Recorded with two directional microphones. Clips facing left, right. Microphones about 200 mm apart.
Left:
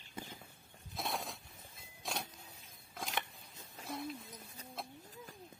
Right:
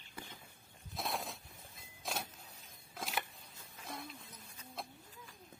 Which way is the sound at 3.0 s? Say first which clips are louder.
Even; centre (ahead or behind).